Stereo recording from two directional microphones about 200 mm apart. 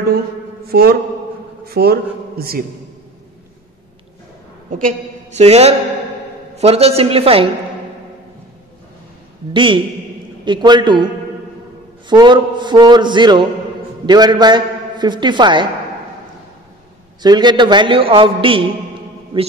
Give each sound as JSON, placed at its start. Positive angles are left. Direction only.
{"t": 0.7, "sound": "a man's voice", "side_deg": -50}
{"t": 4.8, "sound": "a man's voice", "side_deg": -35}
{"t": 9.5, "sound": "a man's voice", "side_deg": -25}
{"t": 12.1, "sound": "a man's voice", "side_deg": -25}
{"t": 17.2, "sound": "a man's voice", "side_deg": -20}